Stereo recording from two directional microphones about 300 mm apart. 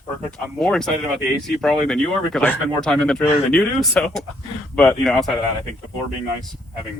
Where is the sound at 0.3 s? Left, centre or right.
Centre.